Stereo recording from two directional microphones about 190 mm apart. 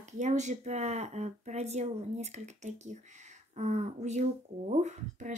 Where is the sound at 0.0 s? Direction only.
40° right (ahead or behind).